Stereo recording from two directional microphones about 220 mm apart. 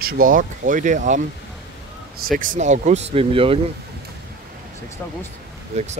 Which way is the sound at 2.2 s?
40° right (ahead or behind).